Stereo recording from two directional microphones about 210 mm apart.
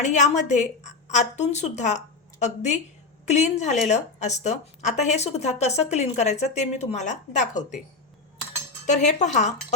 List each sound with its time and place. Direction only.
0.0 s a woman's voice: 35° left (ahead or behind)
8.9 s a woman's voice: 35° left (ahead or behind)